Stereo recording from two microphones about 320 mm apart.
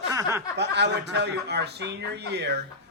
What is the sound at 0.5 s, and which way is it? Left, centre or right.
Speech, right.